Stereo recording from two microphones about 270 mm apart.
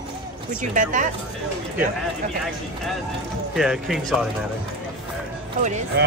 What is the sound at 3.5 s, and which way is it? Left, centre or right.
Speech, centre.